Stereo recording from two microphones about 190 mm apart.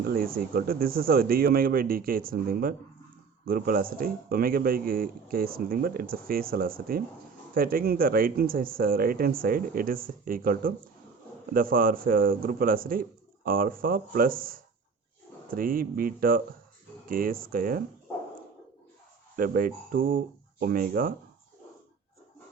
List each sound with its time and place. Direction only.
0.0 s speech: 50° right (ahead or behind)
19.4 s speech: 50° right (ahead or behind)